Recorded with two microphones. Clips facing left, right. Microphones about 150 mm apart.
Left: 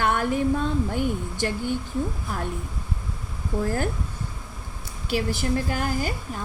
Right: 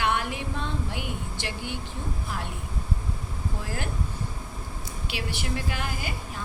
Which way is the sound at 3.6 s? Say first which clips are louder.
Left 10 dB; 45° left (ahead or behind).